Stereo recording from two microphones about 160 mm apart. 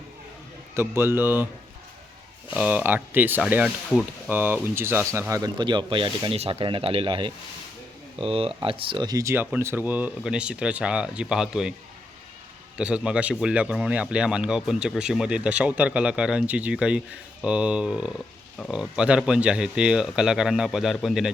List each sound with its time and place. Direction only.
0.7 s speech: 15° right (ahead or behind)
2.5 s speech: 10° right (ahead or behind)
5.3 s speech: 25° right (ahead or behind); by 11.7 s 5° right (ahead or behind)
12.7 s speech: 5° right (ahead or behind)